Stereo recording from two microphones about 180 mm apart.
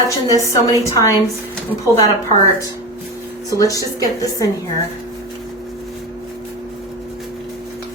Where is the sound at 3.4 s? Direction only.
20° left (ahead or behind).